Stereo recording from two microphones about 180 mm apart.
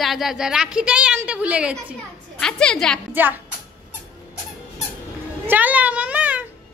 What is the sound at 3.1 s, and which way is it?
Speech, 10° right (ahead or behind).